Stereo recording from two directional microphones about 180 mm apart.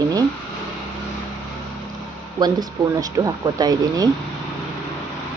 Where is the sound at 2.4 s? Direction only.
20° right (ahead or behind).